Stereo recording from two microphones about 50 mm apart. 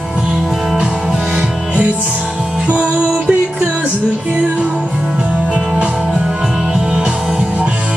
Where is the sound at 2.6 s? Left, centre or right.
Right.